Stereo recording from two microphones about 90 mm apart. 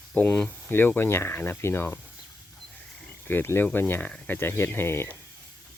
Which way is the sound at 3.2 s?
25° left (ahead or behind).